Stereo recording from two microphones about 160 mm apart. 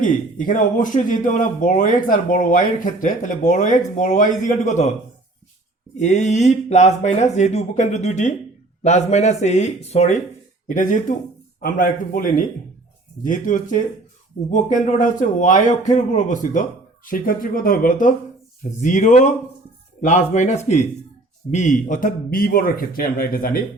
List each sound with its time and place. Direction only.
0.0 s speech: 55° left (ahead or behind)
6.0 s speech: 45° left (ahead or behind)
10.7 s speech: 55° left (ahead or behind)